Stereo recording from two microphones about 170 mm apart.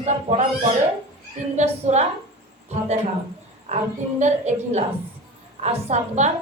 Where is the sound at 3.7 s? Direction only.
45° right (ahead or behind).